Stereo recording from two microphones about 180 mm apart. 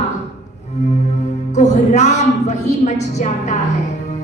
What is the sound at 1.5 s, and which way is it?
A woman's voice, 40° left (ahead or behind).